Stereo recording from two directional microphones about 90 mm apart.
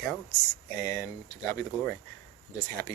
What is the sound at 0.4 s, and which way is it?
Speech, 35° left (ahead or behind).